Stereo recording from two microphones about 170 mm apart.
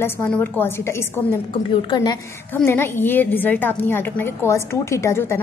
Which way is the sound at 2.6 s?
15° left (ahead or behind).